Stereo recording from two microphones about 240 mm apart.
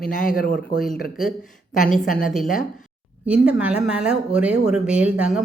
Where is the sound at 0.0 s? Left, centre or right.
Left.